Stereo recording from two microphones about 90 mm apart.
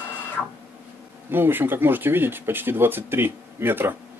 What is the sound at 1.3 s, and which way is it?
Speech, 25° right (ahead or behind).